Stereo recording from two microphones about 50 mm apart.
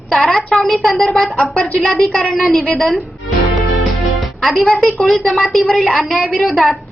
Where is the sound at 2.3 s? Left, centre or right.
Centre.